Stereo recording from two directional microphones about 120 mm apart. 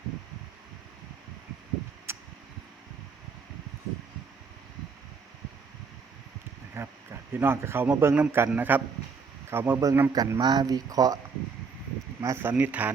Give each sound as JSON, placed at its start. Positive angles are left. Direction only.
{"t": 2.1, "sound": "a sound", "side_deg": -20}
{"t": 6.7, "sound": "speech", "side_deg": -20}
{"t": 10.4, "sound": "speech", "side_deg": -35}
{"t": 12.2, "sound": "speech", "side_deg": -20}